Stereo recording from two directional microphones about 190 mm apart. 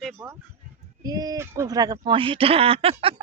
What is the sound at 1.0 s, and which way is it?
Speech, 20° right (ahead or behind).